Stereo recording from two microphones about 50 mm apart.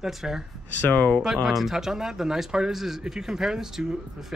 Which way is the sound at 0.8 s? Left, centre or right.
Left.